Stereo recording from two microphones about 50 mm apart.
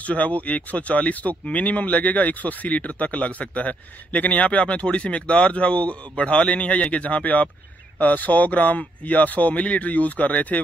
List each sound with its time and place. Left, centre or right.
0.0 s speech: left